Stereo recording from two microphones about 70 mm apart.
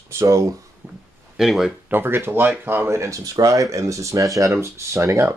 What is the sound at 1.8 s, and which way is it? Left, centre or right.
Speech, right.